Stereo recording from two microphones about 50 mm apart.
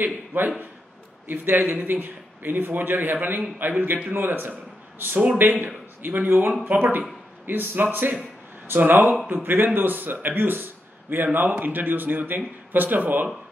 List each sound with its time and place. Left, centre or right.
0.0 s a man's voice: right